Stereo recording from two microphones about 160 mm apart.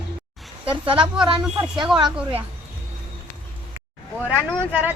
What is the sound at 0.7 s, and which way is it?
Speech, 30° right (ahead or behind).